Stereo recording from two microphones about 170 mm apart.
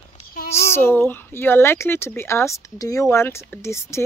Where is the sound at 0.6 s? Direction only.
15° left (ahead or behind).